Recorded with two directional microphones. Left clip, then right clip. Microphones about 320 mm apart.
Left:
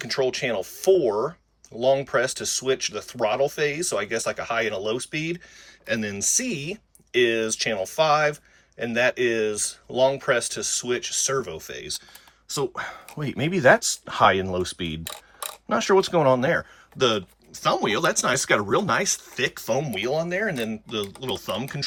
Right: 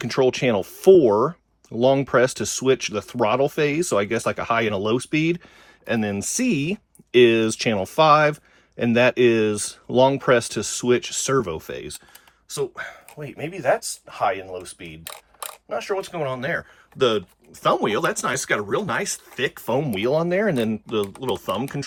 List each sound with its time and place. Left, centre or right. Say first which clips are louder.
0.0 s speech: right 5 dB; centre
12.5 s speech: even; centre
13.5 s speech: left 4 dB; left
15.0 s mechanisms: left 1 dB; centre
15.7 s speech: left 7 dB; left; by 21.8 s centre